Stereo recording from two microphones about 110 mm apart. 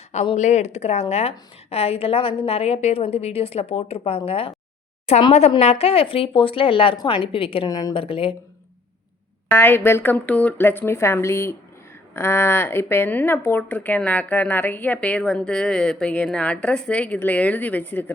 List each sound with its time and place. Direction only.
0.3 s a woman's voice: 90° left; by 4.5 s 60° left (ahead or behind)
5.5 s a woman's voice: 70° left (ahead or behind); by 7.7 s 55° left (ahead or behind)
7.7 s a woman's voice: 35° left (ahead or behind)
7.9 s a woman's voice: 55° left (ahead or behind)
9.5 s a woman's voice: 20° left (ahead or behind)